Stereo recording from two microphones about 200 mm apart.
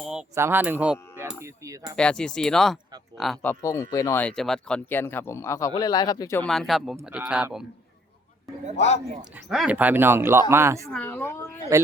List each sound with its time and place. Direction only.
0.0 s a sound: 5° right (ahead or behind)
2.0 s speech: 5° left (ahead or behind)
6.5 s speech: centre (ahead or behind)
8.7 s speech: 35° left (ahead or behind)
9.5 s speech: 5° right (ahead or behind)
10.8 s speech: 5° left (ahead or behind)
11.7 s speech: 15° right (ahead or behind)